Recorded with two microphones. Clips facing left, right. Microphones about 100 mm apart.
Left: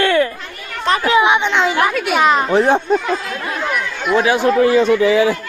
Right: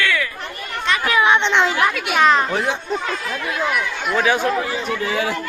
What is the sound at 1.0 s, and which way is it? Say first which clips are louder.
Speech: left 3 dB; 20° left (ahead or behind).